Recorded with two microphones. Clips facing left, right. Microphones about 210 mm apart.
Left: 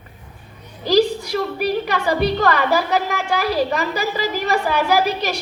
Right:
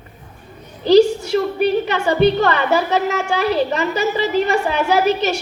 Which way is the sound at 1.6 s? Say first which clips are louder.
Right 3 dB; 25° right (ahead or behind).